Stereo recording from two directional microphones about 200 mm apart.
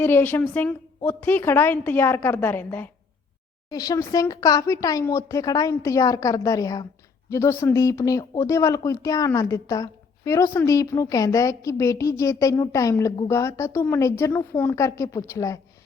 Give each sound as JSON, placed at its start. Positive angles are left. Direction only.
{"t": 0.0, "sound": "speech", "side_deg": 10}